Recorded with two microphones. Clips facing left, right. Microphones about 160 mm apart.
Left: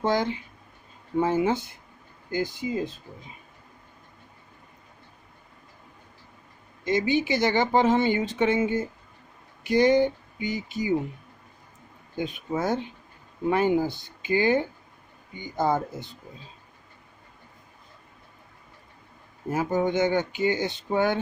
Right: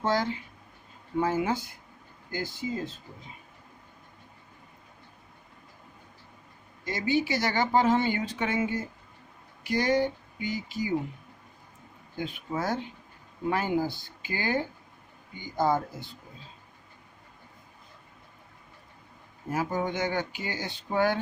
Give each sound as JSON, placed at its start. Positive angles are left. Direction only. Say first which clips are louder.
{"t": 0.0, "sound": "speech", "louder": "left 3 dB", "side_deg": 20}
{"t": 6.8, "sound": "speech", "louder": "left 4 dB", "side_deg": 20}
{"t": 12.1, "sound": "speech", "louder": "left 4 dB", "side_deg": 20}
{"t": 19.5, "sound": "speech", "louder": "left 5 dB", "side_deg": 25}